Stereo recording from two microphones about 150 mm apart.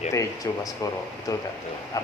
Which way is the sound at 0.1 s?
20° left (ahead or behind).